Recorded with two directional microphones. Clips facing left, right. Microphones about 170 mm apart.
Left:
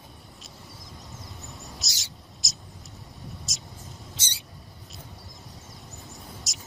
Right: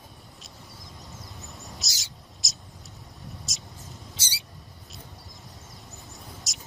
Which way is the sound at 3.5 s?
Centre (ahead or behind).